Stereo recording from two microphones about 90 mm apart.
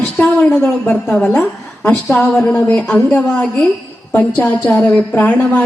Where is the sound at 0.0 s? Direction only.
10° left (ahead or behind).